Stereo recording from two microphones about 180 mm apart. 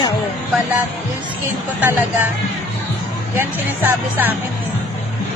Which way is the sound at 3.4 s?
10° right (ahead or behind).